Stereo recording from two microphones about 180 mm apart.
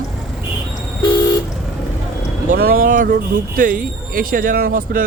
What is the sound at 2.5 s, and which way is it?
Speech, 55° right (ahead or behind).